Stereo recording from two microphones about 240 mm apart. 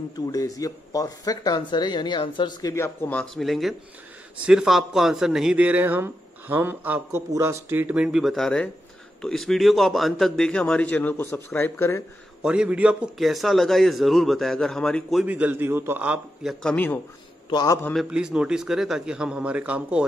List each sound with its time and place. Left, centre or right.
0.1 s a man's voice: centre
12.4 s a man's voice: centre
17.9 s a man's voice: centre